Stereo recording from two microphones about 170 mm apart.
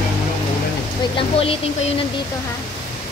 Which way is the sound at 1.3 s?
35° left (ahead or behind).